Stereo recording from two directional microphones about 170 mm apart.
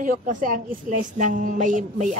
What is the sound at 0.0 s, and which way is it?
A woman's voice, 50° right (ahead or behind).